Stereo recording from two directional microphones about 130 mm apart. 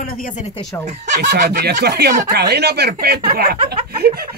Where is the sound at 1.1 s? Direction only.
90° right.